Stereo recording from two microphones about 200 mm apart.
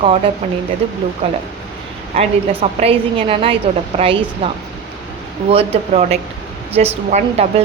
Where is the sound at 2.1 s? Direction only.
30° right (ahead or behind).